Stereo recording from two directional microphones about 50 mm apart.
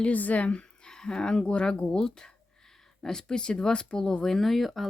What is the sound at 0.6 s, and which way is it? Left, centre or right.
Speech, centre.